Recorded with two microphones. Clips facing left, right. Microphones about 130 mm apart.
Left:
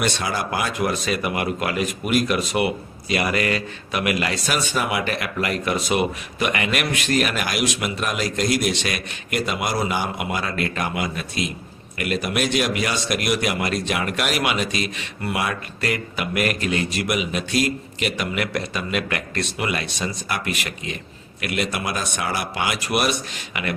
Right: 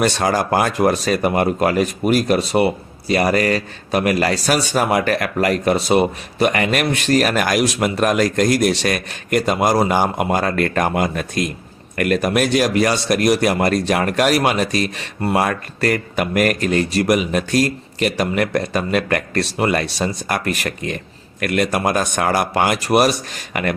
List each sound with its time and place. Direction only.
0.0 s speech: 40° right (ahead or behind)